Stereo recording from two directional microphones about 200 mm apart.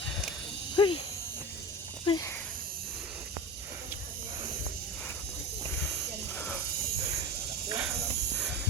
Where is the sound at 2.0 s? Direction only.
20° left (ahead or behind).